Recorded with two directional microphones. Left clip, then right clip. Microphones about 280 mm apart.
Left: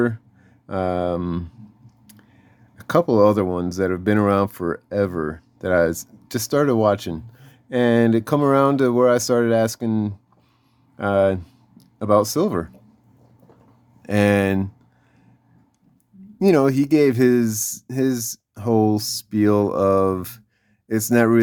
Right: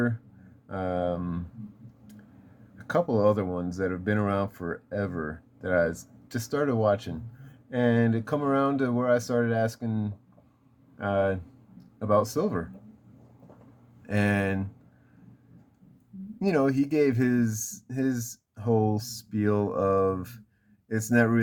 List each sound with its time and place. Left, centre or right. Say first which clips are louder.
0.7 s speech: left 7 dB; left
2.7 s speech: left 9 dB; left
14.1 s speech: left 9 dB; left
16.4 s speech: left 8 dB; left